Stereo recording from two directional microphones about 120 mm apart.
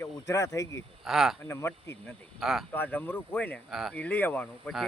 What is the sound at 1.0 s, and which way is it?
Speech, 5° right (ahead or behind).